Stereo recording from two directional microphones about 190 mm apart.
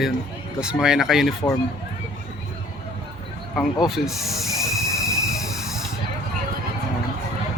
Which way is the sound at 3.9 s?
Centre (ahead or behind).